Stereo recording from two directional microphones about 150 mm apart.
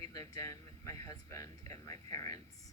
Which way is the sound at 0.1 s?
20° left (ahead or behind).